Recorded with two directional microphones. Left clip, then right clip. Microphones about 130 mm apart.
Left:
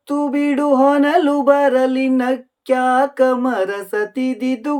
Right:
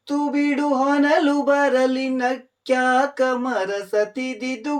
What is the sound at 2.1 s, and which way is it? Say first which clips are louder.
Speech: left 4 dB; 45° left (ahead or behind).